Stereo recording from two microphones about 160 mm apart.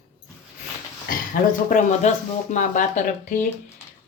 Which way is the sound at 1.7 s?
45° left (ahead or behind).